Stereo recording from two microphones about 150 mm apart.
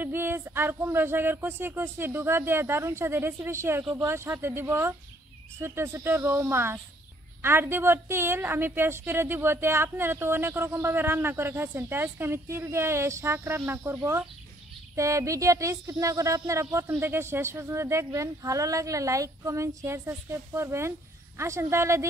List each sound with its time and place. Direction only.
0.0 s a woman's voice: 15° right (ahead or behind)